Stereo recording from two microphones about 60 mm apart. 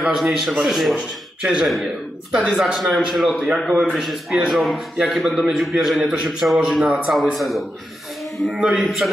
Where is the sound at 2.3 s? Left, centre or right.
Centre.